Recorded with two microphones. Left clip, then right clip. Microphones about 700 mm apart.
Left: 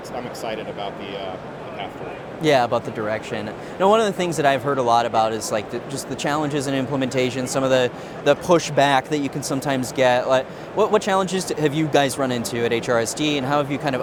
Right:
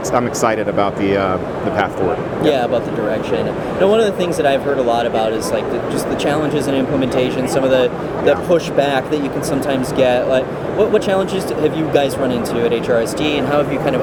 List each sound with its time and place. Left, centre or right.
2.4 s speech: left
3.8 s speech: left